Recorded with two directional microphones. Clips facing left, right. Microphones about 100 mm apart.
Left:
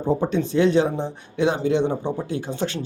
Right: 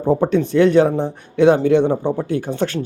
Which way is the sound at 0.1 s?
55° right (ahead or behind).